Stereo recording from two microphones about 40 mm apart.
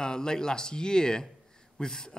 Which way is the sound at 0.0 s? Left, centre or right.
Centre.